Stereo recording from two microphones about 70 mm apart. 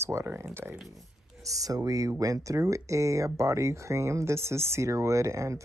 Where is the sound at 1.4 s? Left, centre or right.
Right.